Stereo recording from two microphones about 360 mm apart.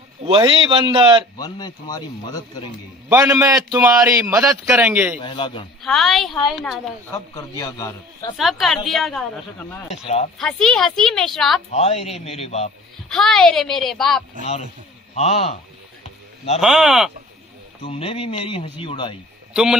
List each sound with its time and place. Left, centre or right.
0.2 s a man's voice: centre
1.4 s speech: centre
3.1 s a man's voice: centre
5.2 s speech: centre
5.8 s a man's voice: centre
10.0 s speech: centre
10.3 s a man's voice: centre
11.7 s speech: centre
13.1 s a man's voice: centre
14.4 s speech: centre
16.6 s a man's voice: centre
17.8 s speech: centre
19.5 s speech: centre